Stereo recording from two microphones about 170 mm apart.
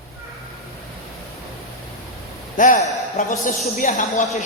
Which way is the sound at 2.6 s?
50° left (ahead or behind).